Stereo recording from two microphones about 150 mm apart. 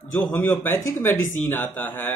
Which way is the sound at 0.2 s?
15° left (ahead or behind).